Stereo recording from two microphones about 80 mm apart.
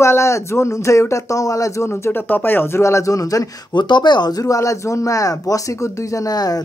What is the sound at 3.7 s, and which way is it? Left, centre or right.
Speech, left.